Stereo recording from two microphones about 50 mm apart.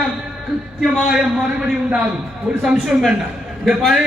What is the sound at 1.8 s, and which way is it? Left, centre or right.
Speech, right.